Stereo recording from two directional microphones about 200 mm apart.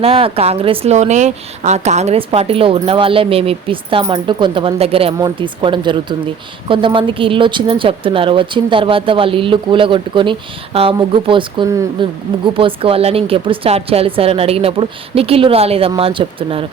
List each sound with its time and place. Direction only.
0.0 s speech: 30° right (ahead or behind)